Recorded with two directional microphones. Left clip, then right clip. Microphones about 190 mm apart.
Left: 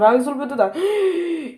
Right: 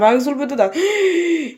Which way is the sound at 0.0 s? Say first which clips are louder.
Right 1 dB; 25° right (ahead or behind).